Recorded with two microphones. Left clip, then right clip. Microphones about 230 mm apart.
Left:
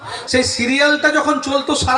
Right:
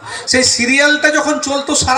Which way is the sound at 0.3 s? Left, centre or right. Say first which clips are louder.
Right 4 dB; right.